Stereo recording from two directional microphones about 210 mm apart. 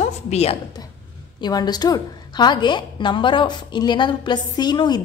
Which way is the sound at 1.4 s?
20° left (ahead or behind).